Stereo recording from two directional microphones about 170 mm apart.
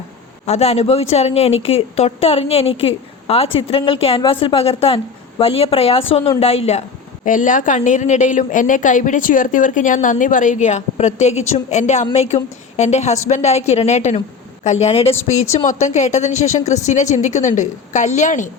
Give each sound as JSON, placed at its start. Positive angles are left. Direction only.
{"t": 0.4, "sound": "speech", "side_deg": 40}
{"t": 7.3, "sound": "speech", "side_deg": 50}